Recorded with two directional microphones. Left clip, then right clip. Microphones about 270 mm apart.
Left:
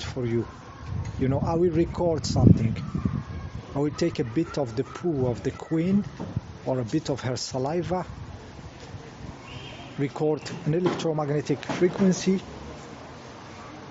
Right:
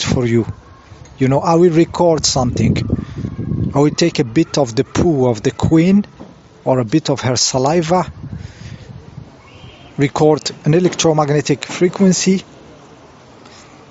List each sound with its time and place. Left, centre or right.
0.0 s speech: right
10.0 s speech: right